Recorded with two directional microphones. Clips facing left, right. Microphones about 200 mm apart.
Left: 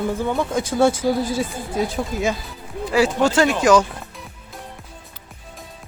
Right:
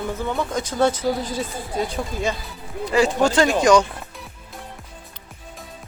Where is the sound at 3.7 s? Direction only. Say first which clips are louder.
Even; 5° left (ahead or behind).